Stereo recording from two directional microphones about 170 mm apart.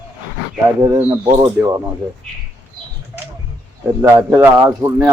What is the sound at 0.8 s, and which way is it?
Speech, 15° right (ahead or behind).